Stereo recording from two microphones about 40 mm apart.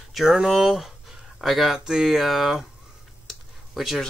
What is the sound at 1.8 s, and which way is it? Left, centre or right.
Speech, centre.